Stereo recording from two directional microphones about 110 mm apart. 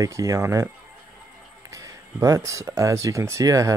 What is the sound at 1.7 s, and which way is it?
Speech, 30° right (ahead or behind).